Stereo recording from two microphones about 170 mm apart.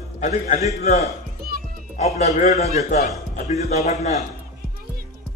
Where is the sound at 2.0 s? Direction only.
40° left (ahead or behind).